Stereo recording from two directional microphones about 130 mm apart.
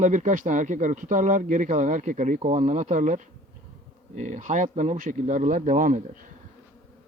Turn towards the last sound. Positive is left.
turn(degrees=-90)